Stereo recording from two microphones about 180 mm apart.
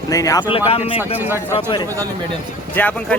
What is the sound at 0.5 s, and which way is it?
Speech, 30° left (ahead or behind).